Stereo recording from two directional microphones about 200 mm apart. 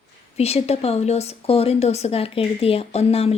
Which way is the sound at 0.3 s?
30° left (ahead or behind).